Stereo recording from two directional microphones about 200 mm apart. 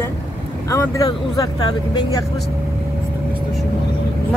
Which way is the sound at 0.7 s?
15° left (ahead or behind).